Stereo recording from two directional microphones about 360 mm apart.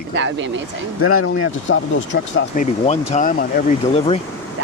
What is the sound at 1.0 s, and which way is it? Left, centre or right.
Speech, left.